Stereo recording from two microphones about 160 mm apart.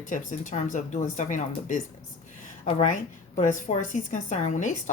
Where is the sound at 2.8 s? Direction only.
50° left (ahead or behind).